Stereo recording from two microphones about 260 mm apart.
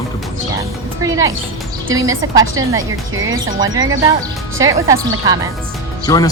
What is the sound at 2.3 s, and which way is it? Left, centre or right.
Speech, centre.